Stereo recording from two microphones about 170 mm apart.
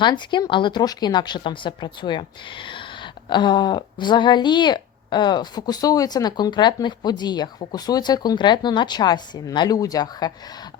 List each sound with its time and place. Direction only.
0.0 s a woman's voice: 25° left (ahead or behind)